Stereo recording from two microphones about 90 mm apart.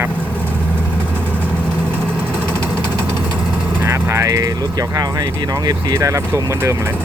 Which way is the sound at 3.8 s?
30° right (ahead or behind).